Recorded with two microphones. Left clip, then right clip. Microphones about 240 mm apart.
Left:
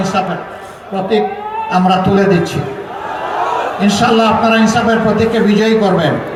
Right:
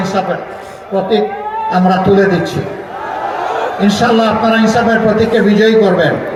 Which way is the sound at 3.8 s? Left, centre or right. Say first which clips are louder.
Even; left.